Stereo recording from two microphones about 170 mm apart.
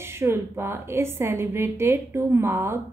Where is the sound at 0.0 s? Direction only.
15° right (ahead or behind).